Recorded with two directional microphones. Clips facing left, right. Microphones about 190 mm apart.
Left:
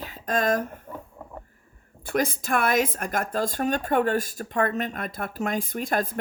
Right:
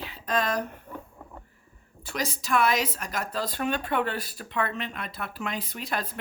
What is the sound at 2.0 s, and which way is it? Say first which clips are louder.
Speech: left 5 dB; 55° left (ahead or behind).